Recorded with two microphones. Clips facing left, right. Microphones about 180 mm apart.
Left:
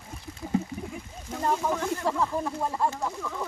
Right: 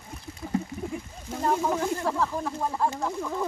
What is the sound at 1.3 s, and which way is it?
Speech, 5° right (ahead or behind).